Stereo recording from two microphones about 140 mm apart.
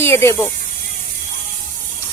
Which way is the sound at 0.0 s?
20° left (ahead or behind).